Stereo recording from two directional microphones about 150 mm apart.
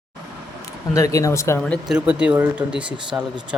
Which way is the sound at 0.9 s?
20° left (ahead or behind).